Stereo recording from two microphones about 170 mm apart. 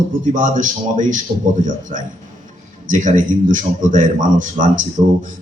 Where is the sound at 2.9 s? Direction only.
50° right (ahead or behind).